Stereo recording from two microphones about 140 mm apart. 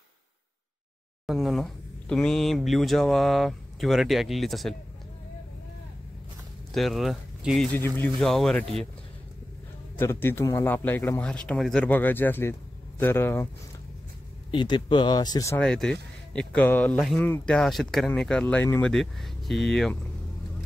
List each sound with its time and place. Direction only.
1.2 s speech: centre (ahead or behind)
6.7 s speech: centre (ahead or behind)
7.7 s speech: 15° left (ahead or behind)
8.2 s speech: centre (ahead or behind)
9.9 s speech: 15° left (ahead or behind)
14.5 s speech: 35° left (ahead or behind)
15.5 s speech: 5° left (ahead or behind)